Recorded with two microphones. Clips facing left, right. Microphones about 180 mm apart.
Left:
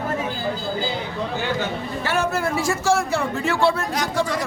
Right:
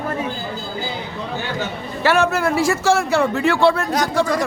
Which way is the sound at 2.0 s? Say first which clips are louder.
Right 6 dB; 80° right.